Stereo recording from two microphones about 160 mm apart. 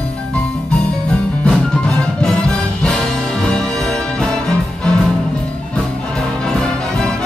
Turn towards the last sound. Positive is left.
turn(degrees=5)  # may be behind; listen again after turning